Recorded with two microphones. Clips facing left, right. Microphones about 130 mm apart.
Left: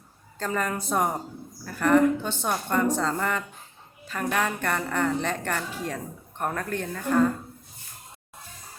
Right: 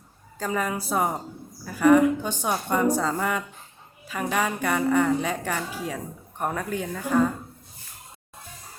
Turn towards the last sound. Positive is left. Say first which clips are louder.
# even
turn(degrees=-5)  # may be behind; listen again after turning